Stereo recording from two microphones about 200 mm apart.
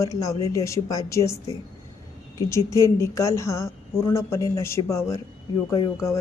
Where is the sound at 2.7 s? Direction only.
15° left (ahead or behind).